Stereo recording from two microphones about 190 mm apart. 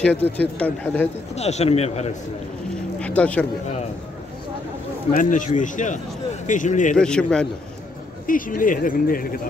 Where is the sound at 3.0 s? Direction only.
5° left (ahead or behind).